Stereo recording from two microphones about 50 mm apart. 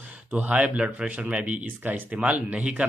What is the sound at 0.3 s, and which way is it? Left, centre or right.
Speech, right.